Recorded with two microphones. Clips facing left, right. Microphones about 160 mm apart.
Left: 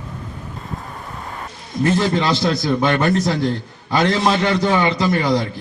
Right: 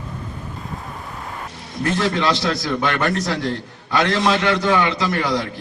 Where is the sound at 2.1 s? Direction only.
25° left (ahead or behind).